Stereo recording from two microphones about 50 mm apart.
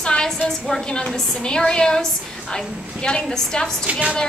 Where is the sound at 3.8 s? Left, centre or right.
Right.